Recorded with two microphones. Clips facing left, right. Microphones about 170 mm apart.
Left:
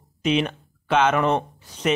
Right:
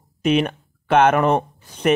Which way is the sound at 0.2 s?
55° right (ahead or behind).